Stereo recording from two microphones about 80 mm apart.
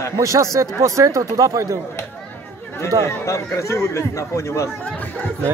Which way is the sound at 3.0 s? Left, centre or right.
Left.